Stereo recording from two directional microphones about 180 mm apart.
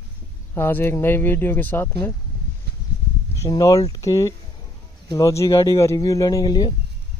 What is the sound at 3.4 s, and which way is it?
Speech, 20° left (ahead or behind).